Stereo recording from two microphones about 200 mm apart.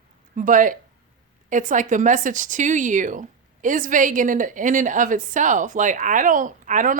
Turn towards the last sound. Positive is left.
turn(degrees=-40)  # may be behind; listen again after turning